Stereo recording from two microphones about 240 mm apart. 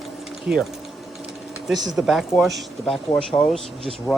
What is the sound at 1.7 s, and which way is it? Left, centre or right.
Speech, centre.